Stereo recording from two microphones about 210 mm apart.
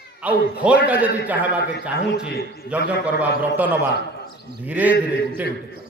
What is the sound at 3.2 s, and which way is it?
A man's voice, 10° right (ahead or behind).